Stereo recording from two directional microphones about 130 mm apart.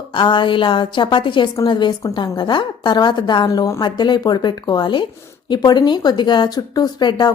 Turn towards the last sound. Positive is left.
turn(degrees=35)  # may be behind; listen again after turning